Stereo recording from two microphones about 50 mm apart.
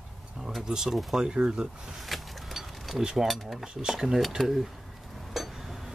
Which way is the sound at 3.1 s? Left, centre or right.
Centre.